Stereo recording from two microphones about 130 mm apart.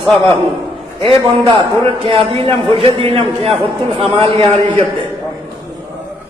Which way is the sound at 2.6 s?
45° right (ahead or behind).